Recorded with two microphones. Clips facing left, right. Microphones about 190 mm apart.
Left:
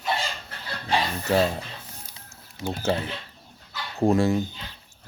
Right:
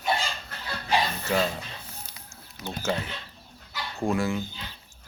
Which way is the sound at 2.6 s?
45° left (ahead or behind).